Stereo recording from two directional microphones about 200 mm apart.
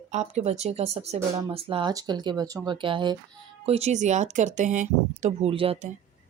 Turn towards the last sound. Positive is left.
turn(degrees=-30)  # may be behind; listen again after turning